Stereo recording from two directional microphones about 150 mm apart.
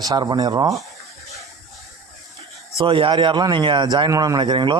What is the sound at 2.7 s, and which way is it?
A man's voice, 35° right (ahead or behind).